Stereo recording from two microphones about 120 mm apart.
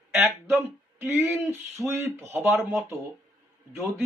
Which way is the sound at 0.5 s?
20° right (ahead or behind).